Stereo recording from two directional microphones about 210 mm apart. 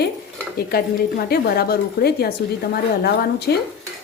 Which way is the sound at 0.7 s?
45° left (ahead or behind).